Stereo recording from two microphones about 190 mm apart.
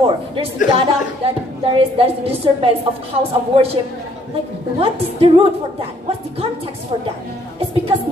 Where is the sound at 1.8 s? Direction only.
30° right (ahead or behind).